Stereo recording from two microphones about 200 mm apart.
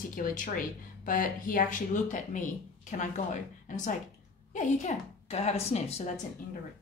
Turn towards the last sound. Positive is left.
turn(degrees=30)  # may be behind; listen again after turning